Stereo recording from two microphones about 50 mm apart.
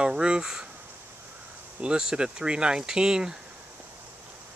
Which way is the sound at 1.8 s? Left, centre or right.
Centre.